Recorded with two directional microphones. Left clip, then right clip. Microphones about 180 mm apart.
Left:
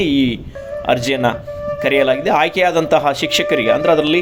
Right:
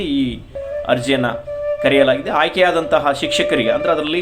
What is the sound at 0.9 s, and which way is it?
Speech, 35° left (ahead or behind).